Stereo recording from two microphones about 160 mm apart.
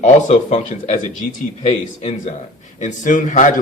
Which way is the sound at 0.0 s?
45° left (ahead or behind).